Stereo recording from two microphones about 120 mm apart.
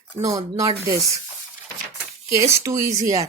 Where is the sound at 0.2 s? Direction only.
30° right (ahead or behind).